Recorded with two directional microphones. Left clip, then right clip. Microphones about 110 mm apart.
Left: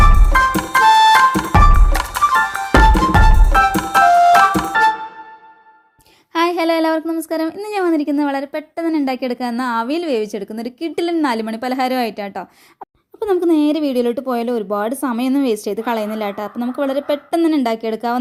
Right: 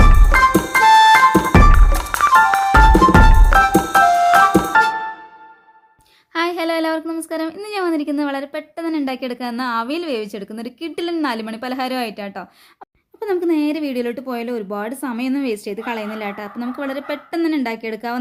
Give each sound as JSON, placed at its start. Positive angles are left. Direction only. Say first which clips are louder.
{"t": 0.0, "sound": "music", "louder": "even", "side_deg": 0}
{"t": 6.3, "sound": "a sound", "louder": "left 4 dB", "side_deg": 35}
{"t": 7.2, "sound": "a woman's voice", "louder": "left 3 dB", "side_deg": 30}